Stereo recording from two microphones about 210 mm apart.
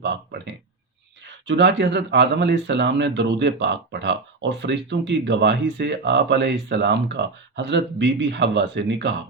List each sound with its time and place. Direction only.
0.0 s speech: 55° right (ahead or behind)